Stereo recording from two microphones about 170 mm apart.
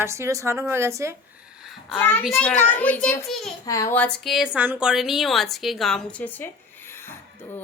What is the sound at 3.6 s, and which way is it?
A woman's voice, 20° left (ahead or behind).